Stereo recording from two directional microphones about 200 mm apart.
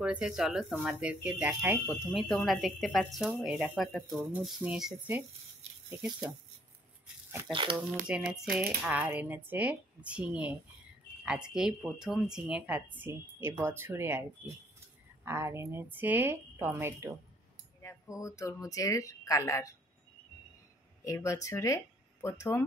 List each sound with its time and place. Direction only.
0.0 s speech: 5° right (ahead or behind)
8.1 s speech: 5° right (ahead or behind)
15.2 s speech: 15° right (ahead or behind)
17.8 s speech: 15° left (ahead or behind)
21.0 s speech: 15° left (ahead or behind)